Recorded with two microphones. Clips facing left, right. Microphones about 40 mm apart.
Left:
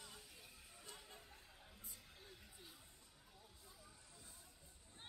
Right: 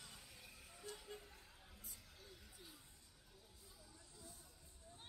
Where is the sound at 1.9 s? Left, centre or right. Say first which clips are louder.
Even; centre.